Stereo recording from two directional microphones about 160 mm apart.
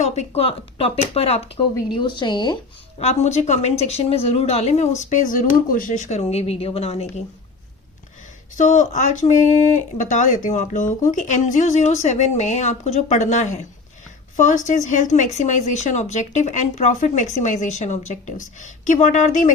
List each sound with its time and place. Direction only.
0.0 s speech: 40° left (ahead or behind)
3.0 s speech: 45° left (ahead or behind)
8.5 s speech: 50° left (ahead or behind)